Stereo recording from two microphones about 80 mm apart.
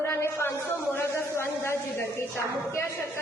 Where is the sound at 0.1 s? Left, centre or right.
Left.